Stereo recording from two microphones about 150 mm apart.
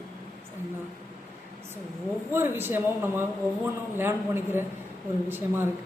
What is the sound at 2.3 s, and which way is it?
Speech, 15° right (ahead or behind).